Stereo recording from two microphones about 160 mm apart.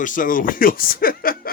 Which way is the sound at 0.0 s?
55° left (ahead or behind).